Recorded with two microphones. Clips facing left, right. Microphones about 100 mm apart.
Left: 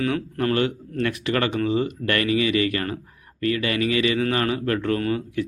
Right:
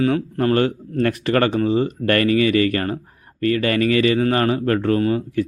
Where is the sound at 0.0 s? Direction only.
35° right (ahead or behind).